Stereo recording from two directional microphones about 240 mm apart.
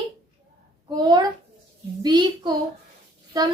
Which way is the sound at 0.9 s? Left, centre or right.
Centre.